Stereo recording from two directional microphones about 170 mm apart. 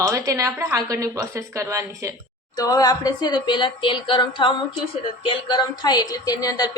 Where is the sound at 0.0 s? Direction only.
20° right (ahead or behind).